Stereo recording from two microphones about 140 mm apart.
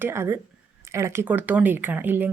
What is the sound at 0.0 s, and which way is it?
A woman's voice, 15° right (ahead or behind).